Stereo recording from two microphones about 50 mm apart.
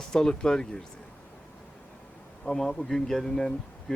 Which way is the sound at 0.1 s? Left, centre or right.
Centre.